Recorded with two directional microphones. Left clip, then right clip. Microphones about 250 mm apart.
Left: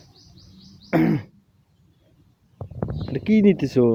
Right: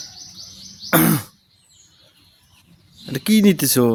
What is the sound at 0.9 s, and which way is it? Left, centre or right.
Throat clearing, right.